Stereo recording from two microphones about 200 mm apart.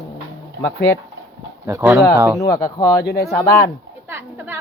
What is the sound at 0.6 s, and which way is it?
Speech, 60° left (ahead or behind).